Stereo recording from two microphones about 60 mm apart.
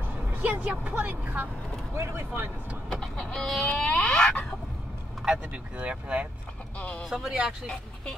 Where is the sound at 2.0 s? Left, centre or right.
Right.